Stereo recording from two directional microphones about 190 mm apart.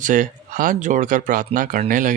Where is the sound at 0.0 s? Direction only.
45° right (ahead or behind).